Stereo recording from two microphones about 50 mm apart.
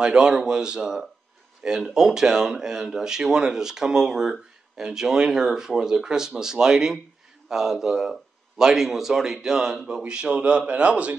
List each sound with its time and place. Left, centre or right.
0.0 s a man's voice: centre